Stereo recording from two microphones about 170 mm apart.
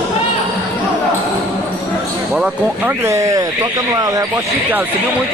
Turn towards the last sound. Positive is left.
turn(degrees=-20)  # may be behind; listen again after turning